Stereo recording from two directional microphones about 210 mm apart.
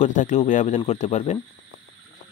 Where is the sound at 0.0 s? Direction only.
35° left (ahead or behind).